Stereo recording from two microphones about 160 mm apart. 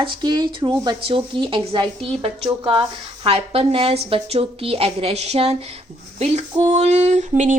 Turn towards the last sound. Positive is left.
turn(degrees=-50)  # may be behind; listen again after turning